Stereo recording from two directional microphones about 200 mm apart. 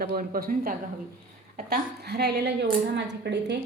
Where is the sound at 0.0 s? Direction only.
50° right (ahead or behind).